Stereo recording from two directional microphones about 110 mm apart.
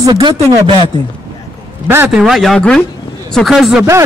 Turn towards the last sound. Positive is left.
turn(degrees=0)  # may be behind; listen again after turning